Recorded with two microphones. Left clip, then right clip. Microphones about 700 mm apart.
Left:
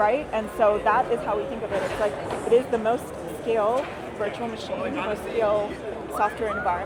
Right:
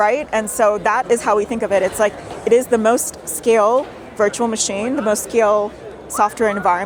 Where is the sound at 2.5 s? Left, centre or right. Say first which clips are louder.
Right 8 dB; right.